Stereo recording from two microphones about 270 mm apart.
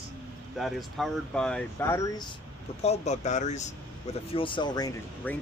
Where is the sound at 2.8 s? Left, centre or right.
Left.